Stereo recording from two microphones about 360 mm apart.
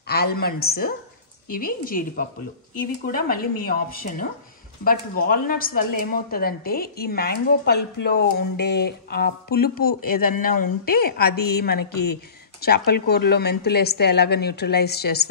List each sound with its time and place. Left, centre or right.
0.0 s a woman's voice: left